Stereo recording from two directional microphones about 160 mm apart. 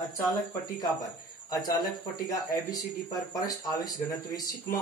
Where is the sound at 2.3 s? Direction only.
25° left (ahead or behind).